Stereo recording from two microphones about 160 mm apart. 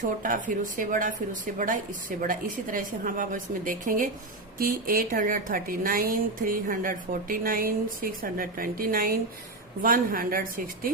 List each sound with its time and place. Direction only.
0.0 s a woman's voice: 55° right (ahead or behind)